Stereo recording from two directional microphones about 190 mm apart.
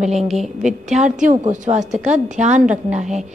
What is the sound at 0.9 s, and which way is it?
A woman's voice, 40° right (ahead or behind).